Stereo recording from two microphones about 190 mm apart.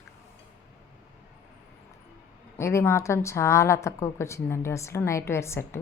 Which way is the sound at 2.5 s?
15° left (ahead or behind).